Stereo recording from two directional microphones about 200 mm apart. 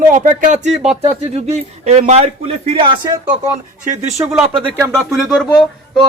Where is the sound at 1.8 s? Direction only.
35° right (ahead or behind).